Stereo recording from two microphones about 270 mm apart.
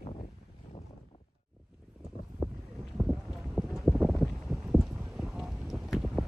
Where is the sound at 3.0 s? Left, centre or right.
Centre.